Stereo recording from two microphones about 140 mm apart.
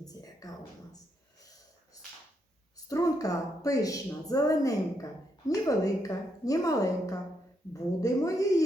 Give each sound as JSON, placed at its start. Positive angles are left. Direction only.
{"t": 0.0, "sound": "a woman's voice", "side_deg": 25}
{"t": 2.7, "sound": "a woman's voice", "side_deg": 25}